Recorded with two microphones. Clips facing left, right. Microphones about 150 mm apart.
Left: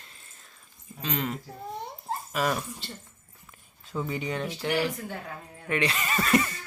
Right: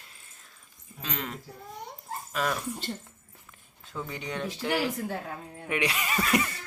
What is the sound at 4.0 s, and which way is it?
Speech, 5° left (ahead or behind).